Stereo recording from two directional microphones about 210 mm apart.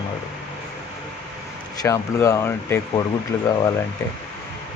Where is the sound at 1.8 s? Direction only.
15° left (ahead or behind).